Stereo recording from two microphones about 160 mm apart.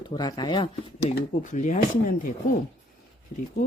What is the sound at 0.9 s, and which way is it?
Speech, 50° left (ahead or behind).